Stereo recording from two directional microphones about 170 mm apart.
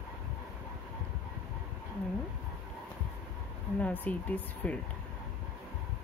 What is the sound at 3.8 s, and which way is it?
Speech, 10° left (ahead or behind).